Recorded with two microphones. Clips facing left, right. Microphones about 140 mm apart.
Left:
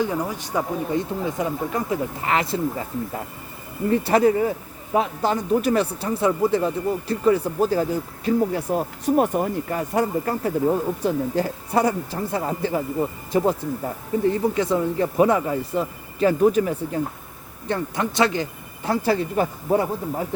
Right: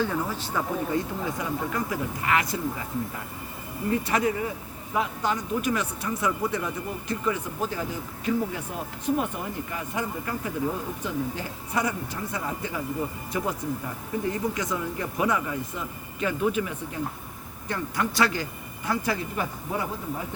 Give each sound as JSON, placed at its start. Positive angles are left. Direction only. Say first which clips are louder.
{"t": 0.0, "sound": "speech", "louder": "left 3 dB", "side_deg": 15}
{"t": 4.0, "sound": "speech", "louder": "left 8 dB", "side_deg": 35}
{"t": 17.7, "sound": "speech", "louder": "left 4 dB", "side_deg": 25}
{"t": 18.9, "sound": "speech", "louder": "left 7 dB", "side_deg": 30}